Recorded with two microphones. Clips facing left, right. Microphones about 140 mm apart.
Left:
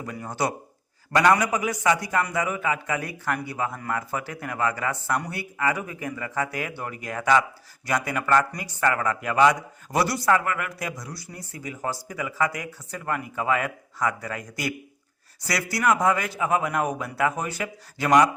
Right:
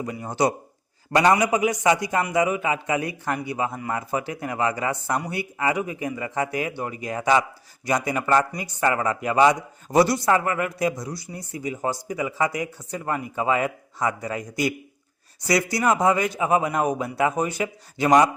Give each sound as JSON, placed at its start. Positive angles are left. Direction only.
{"t": 0.0, "sound": "speech", "side_deg": -20}